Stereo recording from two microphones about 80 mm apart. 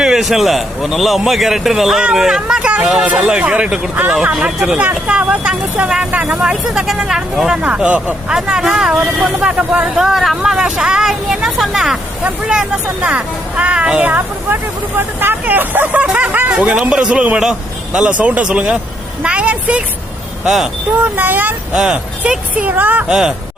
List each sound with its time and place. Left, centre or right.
0.0 s a man's voice: centre; by 6.3 s right
6.3 s a man's voice: centre
7.6 s a man's voice: centre
8.4 s a man's voice: centre
20.4 s speech: centre
21.0 s speech: right
21.8 s speech: centre
23.0 s a man's voice: centre